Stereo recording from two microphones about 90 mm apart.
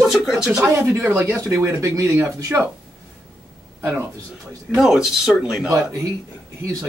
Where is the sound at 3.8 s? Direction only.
25° right (ahead or behind).